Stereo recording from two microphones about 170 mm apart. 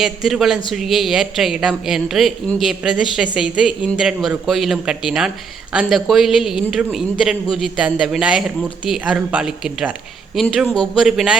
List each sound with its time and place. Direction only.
0.0 s a man's voice: centre (ahead or behind)